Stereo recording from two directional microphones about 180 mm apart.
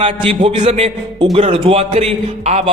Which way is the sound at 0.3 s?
30° right (ahead or behind).